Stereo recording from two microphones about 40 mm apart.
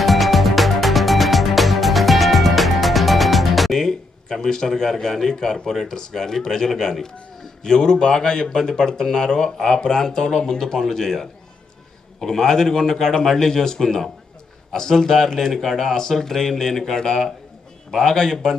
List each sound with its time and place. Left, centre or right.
0.0 s music: centre
3.8 s a man's voice: centre